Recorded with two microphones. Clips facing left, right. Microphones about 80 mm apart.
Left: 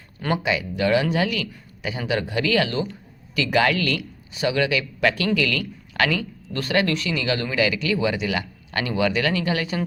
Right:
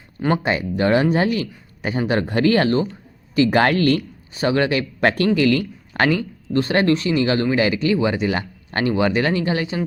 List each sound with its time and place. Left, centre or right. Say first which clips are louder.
0.4 s speech: right 3 dB; right